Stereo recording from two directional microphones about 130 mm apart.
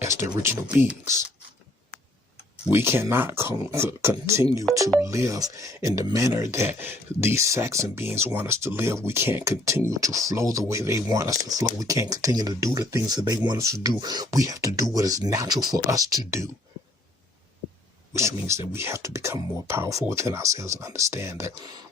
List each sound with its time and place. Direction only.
0.0 s speech: 20° right (ahead or behind)
2.6 s speech: 20° right (ahead or behind)
18.1 s speech: 20° right (ahead or behind)